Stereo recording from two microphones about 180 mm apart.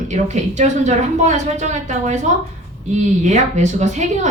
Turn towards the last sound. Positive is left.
turn(degrees=-40)  # may be behind; listen again after turning